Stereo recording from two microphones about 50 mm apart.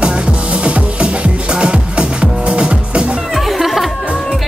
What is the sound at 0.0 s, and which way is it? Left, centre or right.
Music, right.